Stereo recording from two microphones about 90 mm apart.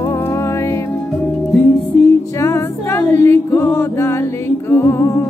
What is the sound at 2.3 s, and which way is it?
Music, 35° left (ahead or behind).